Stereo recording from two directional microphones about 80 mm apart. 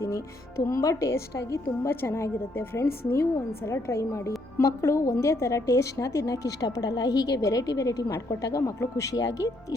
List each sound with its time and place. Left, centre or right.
0.0 s a woman's voice: left